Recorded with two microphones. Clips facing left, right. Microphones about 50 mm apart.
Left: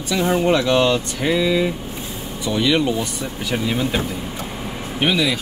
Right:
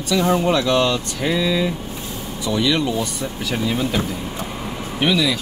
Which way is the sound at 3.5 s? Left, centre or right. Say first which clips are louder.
Left 1 dB; left.